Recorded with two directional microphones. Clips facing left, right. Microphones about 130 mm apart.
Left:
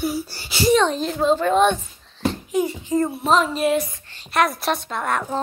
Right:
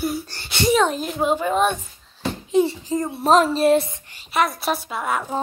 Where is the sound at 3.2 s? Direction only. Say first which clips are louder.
Right 7 dB; 40° right (ahead or behind); by 4.2 s 20° right (ahead or behind).